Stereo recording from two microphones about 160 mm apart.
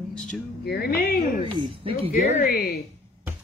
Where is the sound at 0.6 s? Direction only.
85° left; by 1.4 s 70° left (ahead or behind).